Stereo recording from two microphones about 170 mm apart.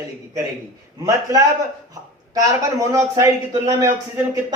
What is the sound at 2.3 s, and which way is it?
Speech, 20° right (ahead or behind).